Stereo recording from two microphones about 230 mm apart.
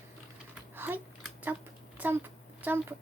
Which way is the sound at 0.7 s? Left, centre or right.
Centre.